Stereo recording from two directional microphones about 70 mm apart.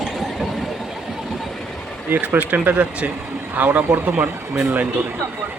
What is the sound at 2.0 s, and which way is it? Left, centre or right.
Speech, right.